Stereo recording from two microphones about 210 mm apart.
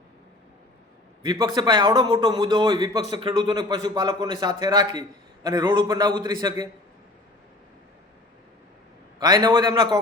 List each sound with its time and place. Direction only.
1.2 s a man's voice: 20° right (ahead or behind)
9.1 s a man's voice: 20° right (ahead or behind)